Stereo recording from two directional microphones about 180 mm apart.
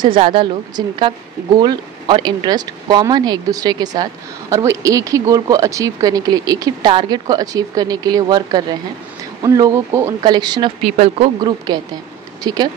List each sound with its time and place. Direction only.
0.2 s speech: 30° right (ahead or behind)
10.8 s speech: 35° right (ahead or behind)
12.4 s speech: 25° right (ahead or behind)